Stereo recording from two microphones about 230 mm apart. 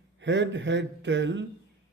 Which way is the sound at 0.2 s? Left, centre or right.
Right.